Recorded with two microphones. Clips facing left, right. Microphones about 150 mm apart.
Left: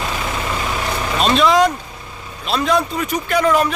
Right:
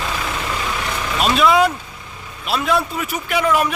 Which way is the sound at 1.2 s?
5° right (ahead or behind).